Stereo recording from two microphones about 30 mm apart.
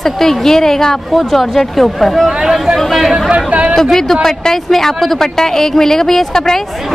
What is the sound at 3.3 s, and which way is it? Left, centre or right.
Speech, right.